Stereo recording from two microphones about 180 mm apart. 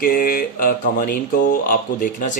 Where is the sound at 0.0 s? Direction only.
50° left (ahead or behind).